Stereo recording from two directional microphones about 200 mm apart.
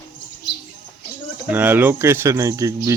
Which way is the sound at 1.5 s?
10° right (ahead or behind).